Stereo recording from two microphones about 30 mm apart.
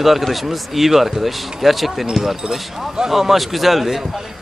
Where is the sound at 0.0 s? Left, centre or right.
Centre.